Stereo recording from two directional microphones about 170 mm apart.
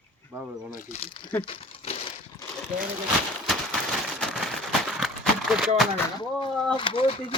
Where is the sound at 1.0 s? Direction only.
30° left (ahead or behind).